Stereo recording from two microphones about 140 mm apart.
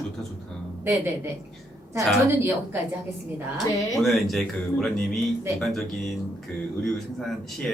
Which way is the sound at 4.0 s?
Centre (ahead or behind).